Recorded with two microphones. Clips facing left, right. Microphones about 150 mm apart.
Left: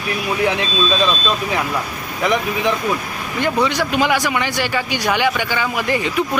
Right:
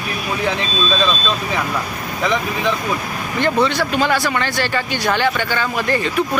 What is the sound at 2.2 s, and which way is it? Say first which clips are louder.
Speech: left 1 dB; 15° left (ahead or behind).